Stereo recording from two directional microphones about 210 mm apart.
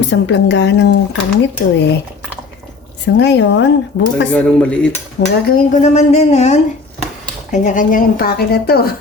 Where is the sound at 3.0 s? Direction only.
55° left (ahead or behind).